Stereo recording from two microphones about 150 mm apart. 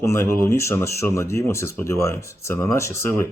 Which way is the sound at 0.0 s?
20° left (ahead or behind).